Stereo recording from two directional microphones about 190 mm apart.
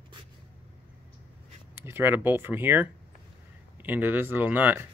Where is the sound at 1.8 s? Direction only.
10° right (ahead or behind).